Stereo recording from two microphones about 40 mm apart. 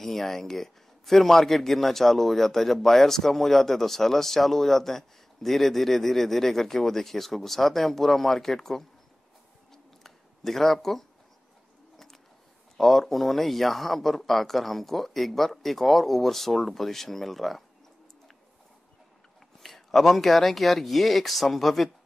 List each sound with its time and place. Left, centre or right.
0.0 s a man's voice: centre
9.7 s a sound: centre
12.7 s speech: centre
19.6 s speech: centre